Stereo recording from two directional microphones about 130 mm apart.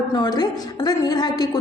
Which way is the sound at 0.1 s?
30° left (ahead or behind).